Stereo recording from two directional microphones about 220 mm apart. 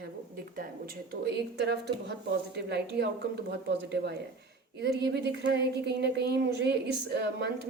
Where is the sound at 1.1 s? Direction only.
50° right (ahead or behind).